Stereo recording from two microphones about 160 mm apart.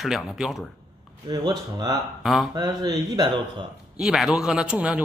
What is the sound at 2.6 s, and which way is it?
Speech, 25° right (ahead or behind).